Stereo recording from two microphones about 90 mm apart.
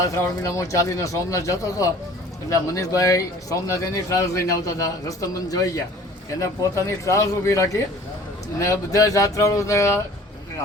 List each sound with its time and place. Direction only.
0.0 s a man's voice: 35° left (ahead or behind)